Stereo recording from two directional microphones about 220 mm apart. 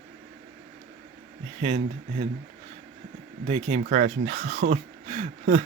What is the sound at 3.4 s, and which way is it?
Speech, 30° right (ahead or behind).